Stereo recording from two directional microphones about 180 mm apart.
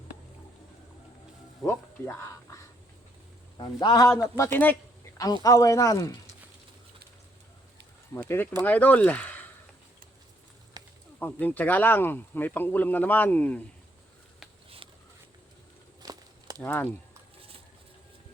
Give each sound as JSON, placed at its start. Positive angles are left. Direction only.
{"t": 1.6, "sound": "speech", "side_deg": 10}
{"t": 3.6, "sound": "speech", "side_deg": 25}
{"t": 8.1, "sound": "speech", "side_deg": 15}
{"t": 10.8, "sound": "snake", "side_deg": -25}
{"t": 11.2, "sound": "speech", "side_deg": 10}
{"t": 16.0, "sound": "a sound", "side_deg": -20}
{"t": 16.6, "sound": "speech", "side_deg": 10}